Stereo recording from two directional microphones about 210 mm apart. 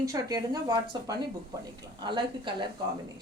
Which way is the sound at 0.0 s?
15° right (ahead or behind).